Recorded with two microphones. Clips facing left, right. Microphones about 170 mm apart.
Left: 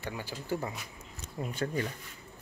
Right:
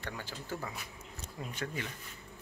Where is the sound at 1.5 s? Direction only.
40° left (ahead or behind).